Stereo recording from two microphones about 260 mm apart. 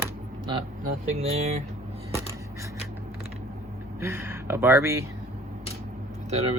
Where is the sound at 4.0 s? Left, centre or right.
Centre.